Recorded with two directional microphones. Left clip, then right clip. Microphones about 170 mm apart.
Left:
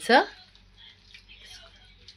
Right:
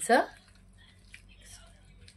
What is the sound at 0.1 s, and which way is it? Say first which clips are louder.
Speech: left 5 dB; 40° left (ahead or behind).